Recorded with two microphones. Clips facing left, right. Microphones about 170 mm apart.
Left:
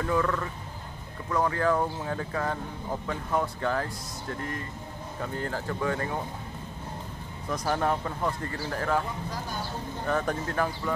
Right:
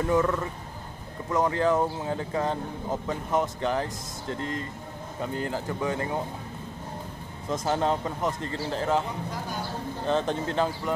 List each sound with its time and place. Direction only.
0.0 s speech: 20° right (ahead or behind)
7.4 s speech: 25° right (ahead or behind)
10.0 s speech: 20° right (ahead or behind)